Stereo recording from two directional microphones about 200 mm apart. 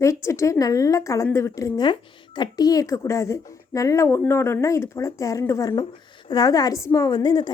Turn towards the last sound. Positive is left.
turn(degrees=20)  # may be behind; listen again after turning